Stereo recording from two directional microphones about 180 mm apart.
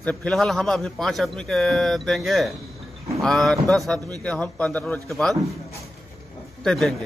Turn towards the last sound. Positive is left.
turn(degrees=5)  # may be behind; listen again after turning